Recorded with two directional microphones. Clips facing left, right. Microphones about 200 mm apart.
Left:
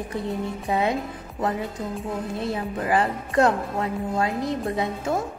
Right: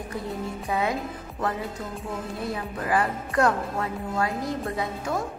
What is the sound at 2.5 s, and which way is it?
Speech, 25° left (ahead or behind).